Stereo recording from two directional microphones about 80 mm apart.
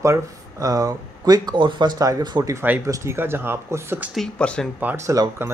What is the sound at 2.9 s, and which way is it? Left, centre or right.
A man's voice, right.